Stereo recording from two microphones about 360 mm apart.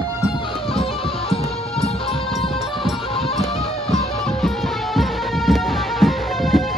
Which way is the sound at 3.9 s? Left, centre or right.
Centre.